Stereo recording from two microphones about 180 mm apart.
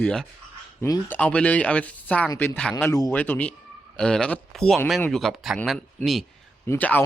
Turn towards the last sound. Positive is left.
turn(degrees=10)  # may be behind; listen again after turning